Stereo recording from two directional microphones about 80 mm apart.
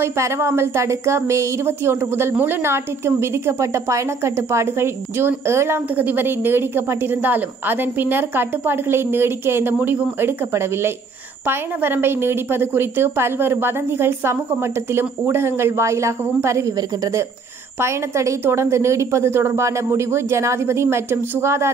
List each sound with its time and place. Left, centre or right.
0.0 s a woman's voice: right
17.7 s a woman's voice: right